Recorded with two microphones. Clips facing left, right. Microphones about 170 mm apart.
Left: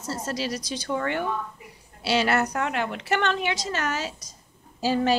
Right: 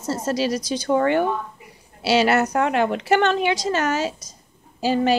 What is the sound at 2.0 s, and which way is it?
Speech, 90° right.